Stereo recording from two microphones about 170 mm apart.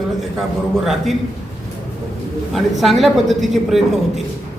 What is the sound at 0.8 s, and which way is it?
Speech, centre (ahead or behind).